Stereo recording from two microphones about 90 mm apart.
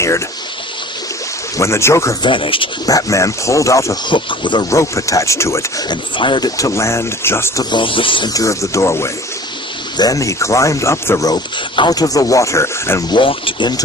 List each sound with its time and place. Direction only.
1.5 s speech: 30° left (ahead or behind)
2.2 s speech: 75° left (ahead or behind)
2.8 s speech: 40° left (ahead or behind)
4.1 s speech: 60° left (ahead or behind)
4.7 s speech: 35° left (ahead or behind)
5.9 s speech: 65° left (ahead or behind)
6.6 s speech: 35° left (ahead or behind)
7.6 s speech: 60° left (ahead or behind)
8.3 s speech: 40° left (ahead or behind)
11.8 s speech: 45° left (ahead or behind)
13.1 s speech: 70° left (ahead or behind)